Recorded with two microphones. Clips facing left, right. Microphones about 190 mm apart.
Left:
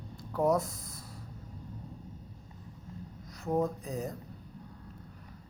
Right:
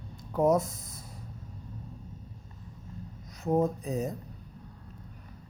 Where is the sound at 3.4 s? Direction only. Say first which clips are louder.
Right 4 dB; 20° right (ahead or behind).